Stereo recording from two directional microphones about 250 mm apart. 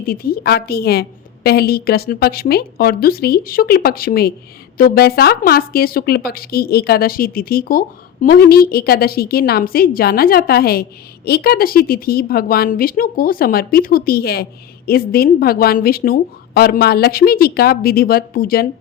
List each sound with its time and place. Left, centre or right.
0.0 s speech: left